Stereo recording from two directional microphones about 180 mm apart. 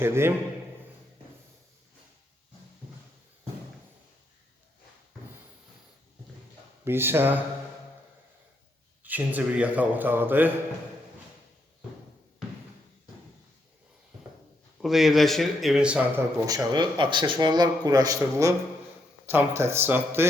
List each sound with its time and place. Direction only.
0.0 s a man's voice: 15° right (ahead or behind)
6.8 s a man's voice: 10° right (ahead or behind)
9.0 s a man's voice: 10° right (ahead or behind)
14.8 s speech: centre (ahead or behind)
16.5 s a man's voice: 20° right (ahead or behind)